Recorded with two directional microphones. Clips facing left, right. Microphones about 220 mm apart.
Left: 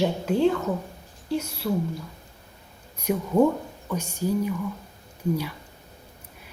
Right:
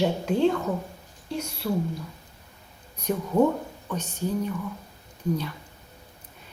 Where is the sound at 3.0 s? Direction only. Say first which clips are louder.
Left 2 dB; 10° left (ahead or behind).